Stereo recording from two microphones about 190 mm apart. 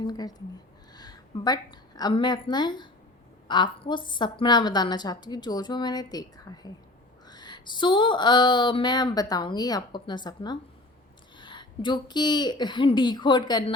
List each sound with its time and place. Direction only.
0.0 s a woman's voice: 20° left (ahead or behind)
7.3 s a sound: 20° left (ahead or behind)
9.3 s a woman's voice: 20° left (ahead or behind)